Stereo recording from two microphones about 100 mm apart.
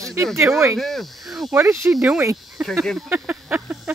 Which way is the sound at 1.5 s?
25° right (ahead or behind).